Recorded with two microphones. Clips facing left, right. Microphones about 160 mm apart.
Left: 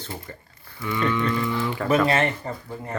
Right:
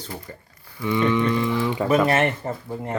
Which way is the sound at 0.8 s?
20° right (ahead or behind).